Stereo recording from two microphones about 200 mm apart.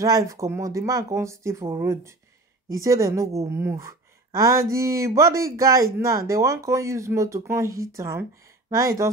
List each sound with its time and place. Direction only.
0.0 s a woman's voice: 15° right (ahead or behind)